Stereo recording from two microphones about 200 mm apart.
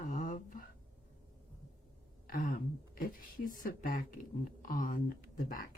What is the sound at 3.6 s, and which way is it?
Speech, 45° left (ahead or behind).